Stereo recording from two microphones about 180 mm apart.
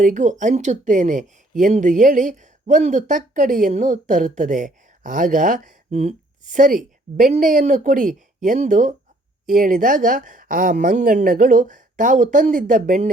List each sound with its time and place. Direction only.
0.0 s speech: 45° right (ahead or behind)